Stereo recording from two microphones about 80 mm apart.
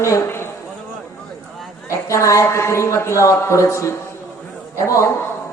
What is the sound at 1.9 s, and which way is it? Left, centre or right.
A woman's voice, left.